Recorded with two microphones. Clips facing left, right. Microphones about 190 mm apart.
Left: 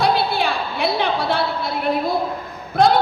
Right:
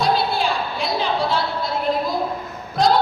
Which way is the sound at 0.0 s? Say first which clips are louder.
Left 1 dB; 60° left (ahead or behind).